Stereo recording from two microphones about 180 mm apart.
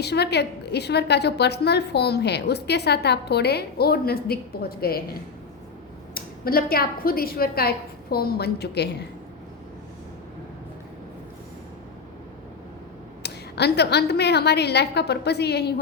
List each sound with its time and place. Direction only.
0.0 s a woman's voice: 65° left (ahead or behind)
6.1 s a woman's voice: 55° left (ahead or behind)
13.2 s a woman's voice: 65° left (ahead or behind)